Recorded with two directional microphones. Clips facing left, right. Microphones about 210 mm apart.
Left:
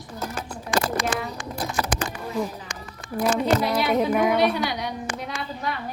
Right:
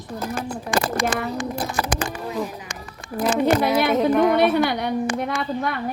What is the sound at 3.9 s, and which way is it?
Speech, 5° left (ahead or behind).